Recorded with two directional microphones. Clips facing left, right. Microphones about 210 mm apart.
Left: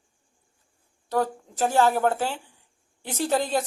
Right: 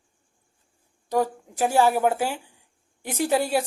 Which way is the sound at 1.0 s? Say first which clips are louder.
Right 2 dB; 15° right (ahead or behind).